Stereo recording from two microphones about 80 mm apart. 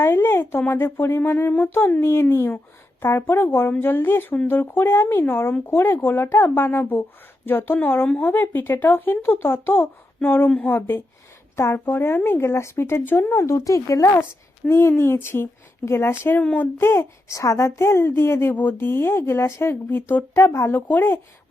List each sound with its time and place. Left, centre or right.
0.0 s a woman's voice: left
14.7 s a woman's voice: left
16.4 s speech: centre
16.7 s a woman's voice: left